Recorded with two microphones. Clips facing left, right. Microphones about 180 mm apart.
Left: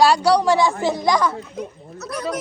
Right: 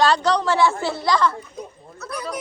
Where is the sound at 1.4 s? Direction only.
90° left.